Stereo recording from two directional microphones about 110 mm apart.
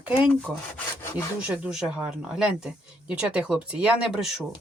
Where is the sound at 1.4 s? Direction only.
10° right (ahead or behind).